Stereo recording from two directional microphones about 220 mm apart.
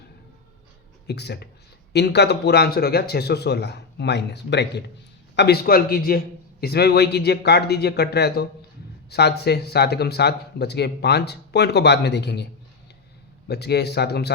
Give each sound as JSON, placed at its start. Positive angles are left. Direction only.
{"t": 1.0, "sound": "speech", "side_deg": 50}
{"t": 13.5, "sound": "speech", "side_deg": 50}